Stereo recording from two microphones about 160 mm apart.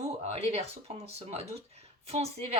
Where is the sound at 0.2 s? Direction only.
40° right (ahead or behind).